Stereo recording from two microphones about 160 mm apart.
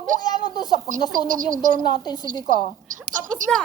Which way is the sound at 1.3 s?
55° right (ahead or behind).